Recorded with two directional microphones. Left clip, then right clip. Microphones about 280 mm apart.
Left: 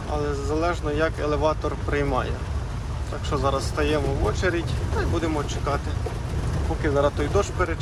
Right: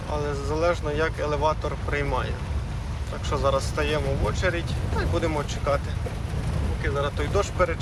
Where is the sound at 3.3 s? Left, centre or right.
Centre.